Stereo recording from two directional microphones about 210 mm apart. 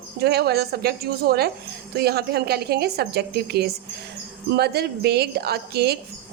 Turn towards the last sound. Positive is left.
turn(degrees=-50)  # may be behind; listen again after turning